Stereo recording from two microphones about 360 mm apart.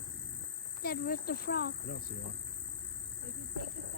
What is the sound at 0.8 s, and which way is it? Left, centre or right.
A child's voice, left.